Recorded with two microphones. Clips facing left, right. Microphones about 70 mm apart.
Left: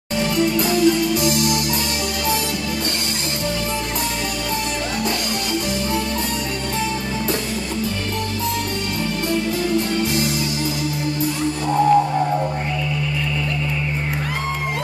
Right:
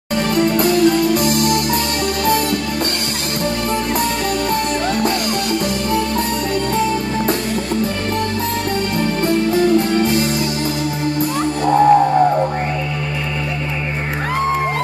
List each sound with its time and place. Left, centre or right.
0.4 s music: right
9.3 s music: right
11.6 s music: right